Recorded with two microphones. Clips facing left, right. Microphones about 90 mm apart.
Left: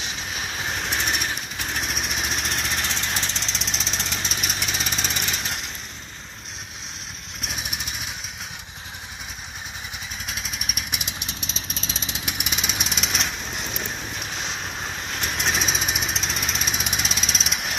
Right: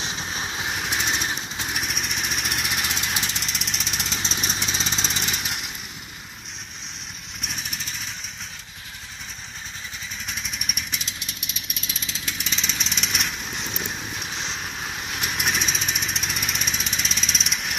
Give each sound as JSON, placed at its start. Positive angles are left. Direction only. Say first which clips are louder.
{"t": 0.0, "sound": "vehicle", "louder": "right 1 dB", "side_deg": -20}
{"t": 1.8, "sound": "vehicle", "louder": "left 2 dB", "side_deg": 0}
{"t": 4.1, "sound": "vehicle", "louder": "even", "side_deg": 10}
{"t": 5.1, "sound": "vehicle", "louder": "even", "side_deg": -15}
{"t": 7.4, "sound": "vehicle", "louder": "left 2 dB", "side_deg": 10}
{"t": 10.2, "sound": "vehicle", "louder": "even", "side_deg": 0}
{"t": 10.9, "sound": "vehicle", "louder": "left 2 dB", "side_deg": 15}
{"t": 15.1, "sound": "lawn mower", "louder": "left 1 dB", "side_deg": -5}